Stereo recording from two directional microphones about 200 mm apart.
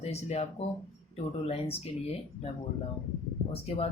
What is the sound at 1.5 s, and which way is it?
Speech, 30° left (ahead or behind).